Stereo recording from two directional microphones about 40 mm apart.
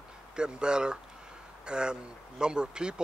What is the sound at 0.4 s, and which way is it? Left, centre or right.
Speech, right.